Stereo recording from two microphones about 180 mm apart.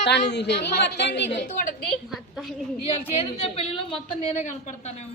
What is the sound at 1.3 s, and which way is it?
Speech, 45° left (ahead or behind).